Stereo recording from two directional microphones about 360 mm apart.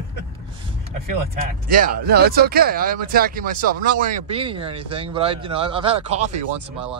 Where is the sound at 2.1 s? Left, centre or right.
Right.